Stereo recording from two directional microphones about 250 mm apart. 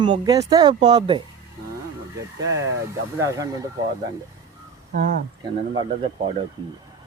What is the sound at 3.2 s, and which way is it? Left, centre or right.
Speech, centre.